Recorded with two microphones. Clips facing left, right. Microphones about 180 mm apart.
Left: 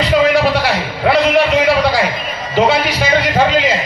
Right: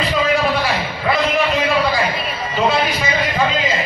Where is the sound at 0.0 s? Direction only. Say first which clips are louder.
Left 5 dB; 75° left (ahead or behind).